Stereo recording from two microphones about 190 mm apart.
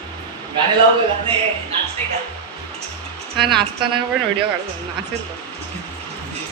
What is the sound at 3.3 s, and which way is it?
Speech, 25° right (ahead or behind).